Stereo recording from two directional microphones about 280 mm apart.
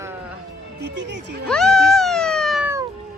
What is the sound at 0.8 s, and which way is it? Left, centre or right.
Speech, right.